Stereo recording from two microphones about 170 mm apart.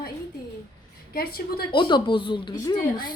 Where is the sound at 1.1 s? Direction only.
65° left (ahead or behind).